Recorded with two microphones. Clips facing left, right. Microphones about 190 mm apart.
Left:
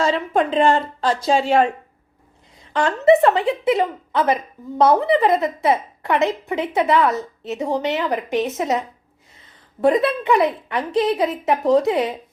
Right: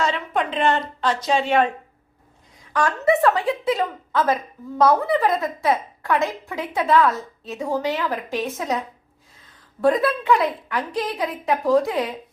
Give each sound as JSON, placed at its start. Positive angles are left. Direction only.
{"t": 0.0, "sound": "a woman's voice", "side_deg": 35}
{"t": 2.7, "sound": "a woman's voice", "side_deg": 25}
{"t": 9.8, "sound": "a woman's voice", "side_deg": 20}